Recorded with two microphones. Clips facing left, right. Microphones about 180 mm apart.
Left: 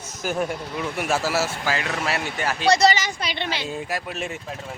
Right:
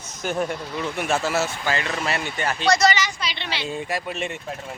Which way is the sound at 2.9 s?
50° left (ahead or behind).